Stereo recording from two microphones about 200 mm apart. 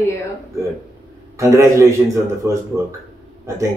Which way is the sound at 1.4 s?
15° right (ahead or behind).